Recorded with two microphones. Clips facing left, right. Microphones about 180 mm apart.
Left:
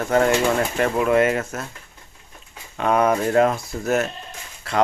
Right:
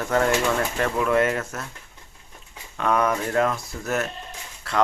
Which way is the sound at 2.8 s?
20° left (ahead or behind).